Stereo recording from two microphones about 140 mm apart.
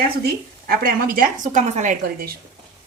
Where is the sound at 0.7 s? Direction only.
90° right; by 2.3 s 65° right (ahead or behind).